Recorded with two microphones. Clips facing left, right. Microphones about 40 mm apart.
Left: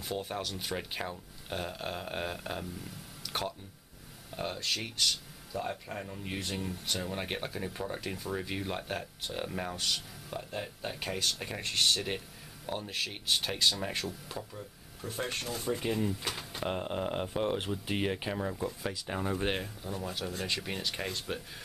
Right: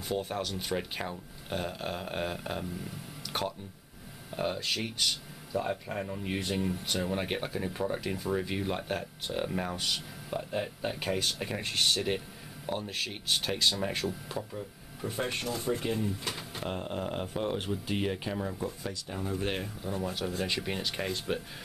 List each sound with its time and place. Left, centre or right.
0.1 s speech: centre
16.1 s speech: centre
16.6 s speech: centre
19.0 s speech: left
19.6 s speech: centre